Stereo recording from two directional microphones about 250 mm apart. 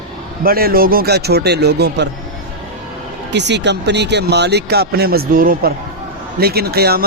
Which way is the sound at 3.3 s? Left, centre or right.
Right.